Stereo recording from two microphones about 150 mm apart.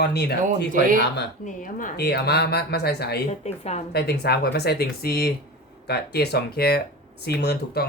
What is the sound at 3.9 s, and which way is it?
Speech, 90° left.